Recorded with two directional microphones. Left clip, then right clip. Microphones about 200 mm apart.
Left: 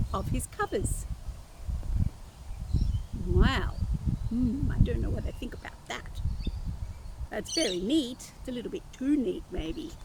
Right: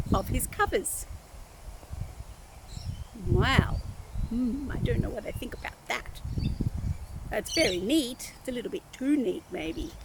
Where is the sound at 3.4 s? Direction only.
10° right (ahead or behind).